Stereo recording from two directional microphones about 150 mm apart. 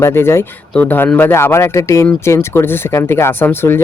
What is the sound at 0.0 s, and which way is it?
Speech, 15° left (ahead or behind).